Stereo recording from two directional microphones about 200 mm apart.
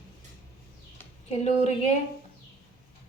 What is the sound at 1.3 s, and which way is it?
Speech, 35° left (ahead or behind).